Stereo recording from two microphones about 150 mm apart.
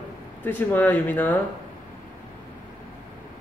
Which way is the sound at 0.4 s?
10° left (ahead or behind).